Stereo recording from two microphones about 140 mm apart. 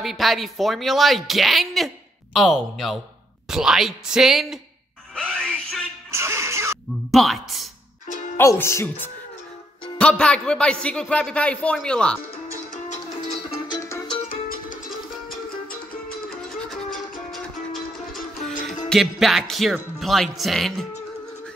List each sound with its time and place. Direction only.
0.0 s speech: centre (ahead or behind)
5.4 s a sound: 5° left (ahead or behind)
6.1 s music: 20° right (ahead or behind)
7.1 s speech: centre (ahead or behind)
8.4 s a man's voice: 20° left (ahead or behind)
13.7 s music: 20° left (ahead or behind)
14.3 s music: 75° left (ahead or behind)
16.3 s music: centre (ahead or behind)
18.5 s music: 65° left (ahead or behind)
18.9 s speech: centre (ahead or behind)